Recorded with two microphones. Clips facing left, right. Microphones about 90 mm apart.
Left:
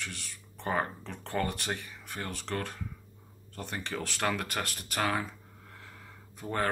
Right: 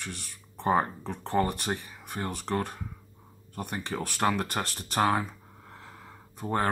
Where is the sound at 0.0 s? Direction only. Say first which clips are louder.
Right 2 dB; 20° right (ahead or behind).